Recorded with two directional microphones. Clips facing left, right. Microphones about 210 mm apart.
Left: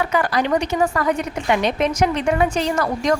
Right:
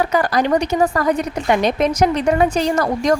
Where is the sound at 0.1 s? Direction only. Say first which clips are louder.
Right 3 dB; 40° right (ahead or behind).